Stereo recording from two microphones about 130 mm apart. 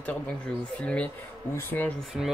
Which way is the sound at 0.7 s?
10° left (ahead or behind).